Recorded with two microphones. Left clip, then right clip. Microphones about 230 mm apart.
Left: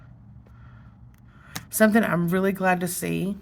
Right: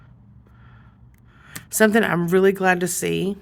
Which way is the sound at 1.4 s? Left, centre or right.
Right.